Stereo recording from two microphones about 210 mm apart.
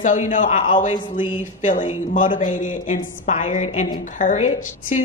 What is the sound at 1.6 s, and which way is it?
A woman's voice, 40° left (ahead or behind).